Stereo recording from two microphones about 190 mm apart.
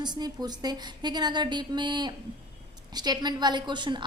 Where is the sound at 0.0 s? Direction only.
20° right (ahead or behind).